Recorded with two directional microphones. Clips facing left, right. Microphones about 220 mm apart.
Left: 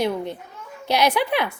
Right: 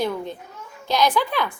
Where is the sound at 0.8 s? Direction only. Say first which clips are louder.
Left 1 dB; 65° left (ahead or behind).